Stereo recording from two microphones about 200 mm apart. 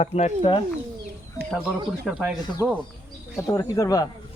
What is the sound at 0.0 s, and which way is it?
Speech, 30° left (ahead or behind).